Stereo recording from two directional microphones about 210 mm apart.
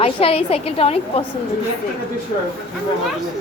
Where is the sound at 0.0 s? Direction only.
30° left (ahead or behind).